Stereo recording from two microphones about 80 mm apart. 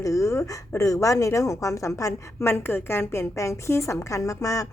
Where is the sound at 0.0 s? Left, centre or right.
Left.